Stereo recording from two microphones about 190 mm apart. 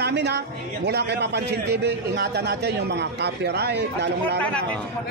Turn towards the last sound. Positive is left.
turn(degrees=5)  # may be behind; listen again after turning